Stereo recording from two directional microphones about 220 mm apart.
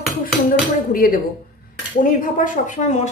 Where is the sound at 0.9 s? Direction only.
40° left (ahead or behind).